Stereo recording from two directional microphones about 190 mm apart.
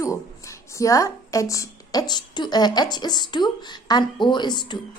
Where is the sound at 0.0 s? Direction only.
15° left (ahead or behind).